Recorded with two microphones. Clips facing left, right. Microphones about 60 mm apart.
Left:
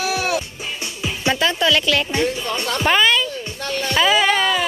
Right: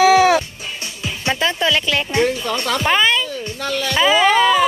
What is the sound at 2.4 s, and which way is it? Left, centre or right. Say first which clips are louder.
Speech: right 3 dB; right.